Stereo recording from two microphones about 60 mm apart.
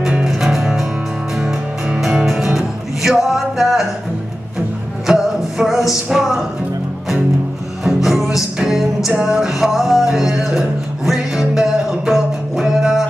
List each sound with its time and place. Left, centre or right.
0.0 s music: centre
5.0 s music: centre
7.8 s music: centre